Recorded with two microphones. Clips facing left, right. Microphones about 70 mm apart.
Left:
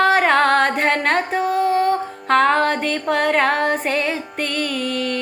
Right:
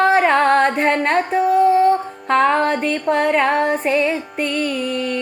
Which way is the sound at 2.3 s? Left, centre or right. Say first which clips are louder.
Even; left.